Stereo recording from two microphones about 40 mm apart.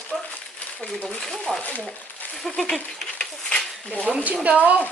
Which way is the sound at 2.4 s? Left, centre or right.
Centre.